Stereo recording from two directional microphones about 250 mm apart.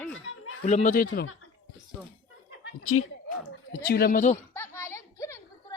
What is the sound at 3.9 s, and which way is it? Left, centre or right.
Speech, left.